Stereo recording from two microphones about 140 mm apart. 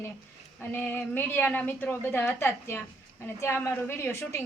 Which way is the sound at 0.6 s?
15° left (ahead or behind).